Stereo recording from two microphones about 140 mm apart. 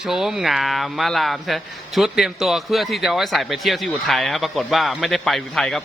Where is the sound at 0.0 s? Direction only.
5° right (ahead or behind).